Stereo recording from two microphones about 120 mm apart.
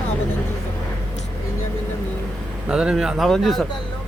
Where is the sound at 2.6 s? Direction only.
5° right (ahead or behind).